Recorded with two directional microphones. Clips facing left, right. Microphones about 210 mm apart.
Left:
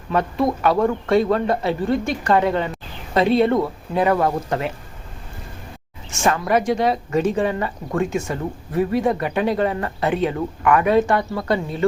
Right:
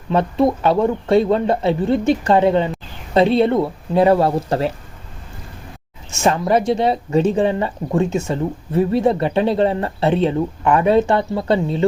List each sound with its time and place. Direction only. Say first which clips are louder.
0.1 s speech: right 4 dB; 25° right (ahead or behind)
6.2 s speech: right 3 dB; 25° right (ahead or behind)